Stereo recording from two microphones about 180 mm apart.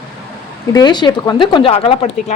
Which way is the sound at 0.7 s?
25° left (ahead or behind).